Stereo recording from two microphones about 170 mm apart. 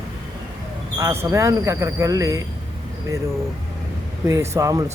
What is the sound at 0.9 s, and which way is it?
Speech, 15° right (ahead or behind).